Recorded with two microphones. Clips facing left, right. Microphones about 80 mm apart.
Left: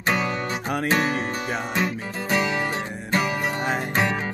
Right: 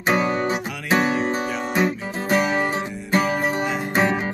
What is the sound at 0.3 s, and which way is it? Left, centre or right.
Music, centre.